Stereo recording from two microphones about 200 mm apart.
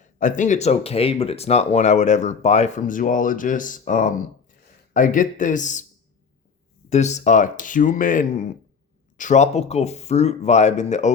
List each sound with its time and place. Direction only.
0.0 s speech: 40° left (ahead or behind)
6.9 s speech: 35° left (ahead or behind)